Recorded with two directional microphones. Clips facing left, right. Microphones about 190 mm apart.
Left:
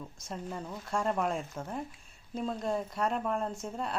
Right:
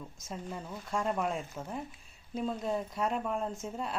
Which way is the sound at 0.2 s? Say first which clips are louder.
Left 2 dB; centre (ahead or behind).